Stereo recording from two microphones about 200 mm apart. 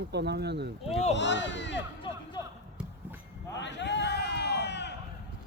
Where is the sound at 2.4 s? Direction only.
20° left (ahead or behind).